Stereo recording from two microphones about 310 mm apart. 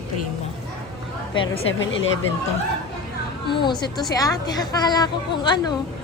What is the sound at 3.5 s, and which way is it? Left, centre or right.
A woman's voice, centre.